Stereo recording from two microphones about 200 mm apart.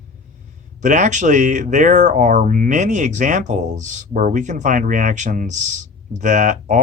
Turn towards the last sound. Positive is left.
turn(degrees=-40)  # may be behind; listen again after turning